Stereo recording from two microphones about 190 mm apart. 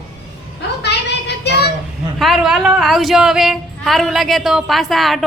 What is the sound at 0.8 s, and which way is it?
Child singing, 60° left (ahead or behind).